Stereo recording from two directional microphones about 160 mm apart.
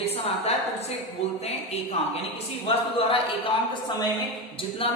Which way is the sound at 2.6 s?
35° left (ahead or behind).